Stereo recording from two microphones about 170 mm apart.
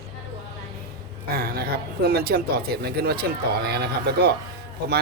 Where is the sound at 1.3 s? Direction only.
60° right (ahead or behind).